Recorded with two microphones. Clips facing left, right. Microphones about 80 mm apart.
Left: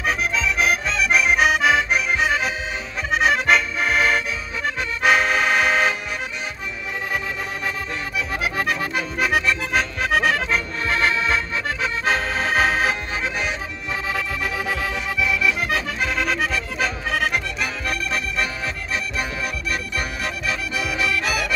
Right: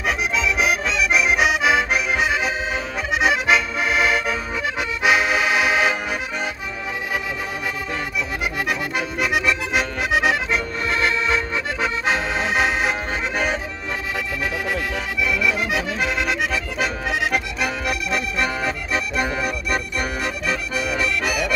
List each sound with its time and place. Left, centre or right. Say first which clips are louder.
0.3 s accordion: even; centre
8.5 s accordion: even; centre
12.1 s music: left 2 dB; centre
15.2 s accordion: right 1 dB; centre
18.6 s music: right 3 dB; right
19.4 s music: right 3 dB; centre